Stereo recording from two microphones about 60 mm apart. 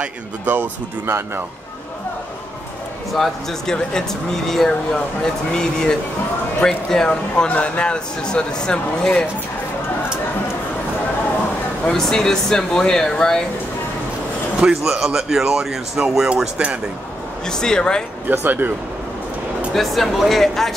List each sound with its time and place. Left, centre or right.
1.0 s speech: right
3.1 s speech: centre
11.9 s speech: centre
14.6 s speech: centre
17.5 s speech: centre
18.3 s speech: right
19.7 s speech: centre